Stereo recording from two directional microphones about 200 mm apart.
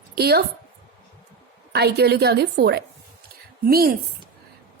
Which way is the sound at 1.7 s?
55° right (ahead or behind).